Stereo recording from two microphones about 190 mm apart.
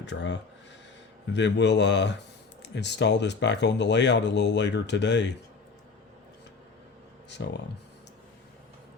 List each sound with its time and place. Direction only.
0.0 s speech: 70° left (ahead or behind)
7.3 s speech: 65° left (ahead or behind)